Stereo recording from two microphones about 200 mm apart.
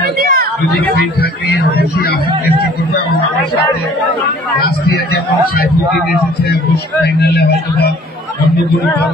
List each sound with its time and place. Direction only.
0.0 s a sound: 50° right (ahead or behind)
1.8 s speech: 50° left (ahead or behind)
7.2 s speech: 55° left (ahead or behind)